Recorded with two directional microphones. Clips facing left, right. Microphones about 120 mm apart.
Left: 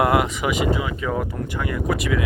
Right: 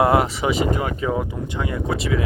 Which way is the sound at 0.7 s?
45° right (ahead or behind).